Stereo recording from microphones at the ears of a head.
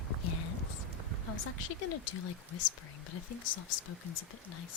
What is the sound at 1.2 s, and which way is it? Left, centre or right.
Speech, left.